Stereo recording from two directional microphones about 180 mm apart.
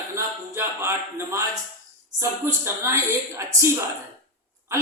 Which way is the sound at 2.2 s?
15° right (ahead or behind).